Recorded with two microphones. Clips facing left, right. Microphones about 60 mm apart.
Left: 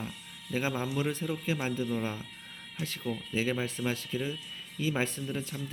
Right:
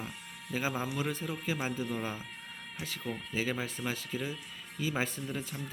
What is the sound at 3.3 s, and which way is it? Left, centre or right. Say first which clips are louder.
Speech: left 3 dB; centre.